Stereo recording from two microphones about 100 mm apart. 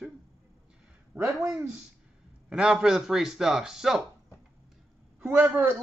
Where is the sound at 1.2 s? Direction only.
5° right (ahead or behind).